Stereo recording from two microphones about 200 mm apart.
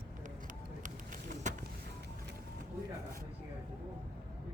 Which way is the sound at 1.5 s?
40° right (ahead or behind).